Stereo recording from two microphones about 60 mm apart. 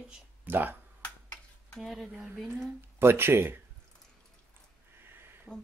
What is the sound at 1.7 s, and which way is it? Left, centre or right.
Speech, centre.